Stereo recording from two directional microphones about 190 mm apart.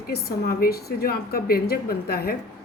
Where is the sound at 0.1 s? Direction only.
55° left (ahead or behind).